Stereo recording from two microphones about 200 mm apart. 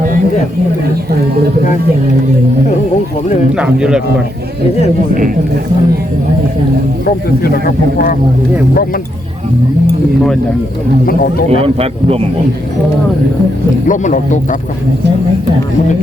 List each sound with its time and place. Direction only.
3.6 s speech: 5° right (ahead or behind)
7.4 s a man's voice: 50° left (ahead or behind)
11.5 s speech: 30° right (ahead or behind)
13.8 s speech: 40° left (ahead or behind)